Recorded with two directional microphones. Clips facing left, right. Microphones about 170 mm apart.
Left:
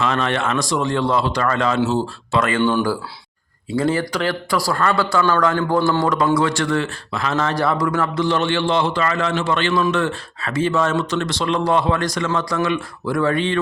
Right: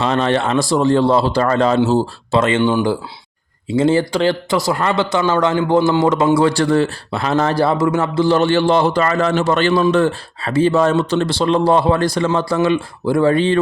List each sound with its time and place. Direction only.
0.0 s speech: 35° right (ahead or behind)